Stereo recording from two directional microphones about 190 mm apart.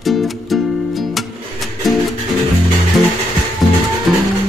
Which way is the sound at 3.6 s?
Centre (ahead or behind).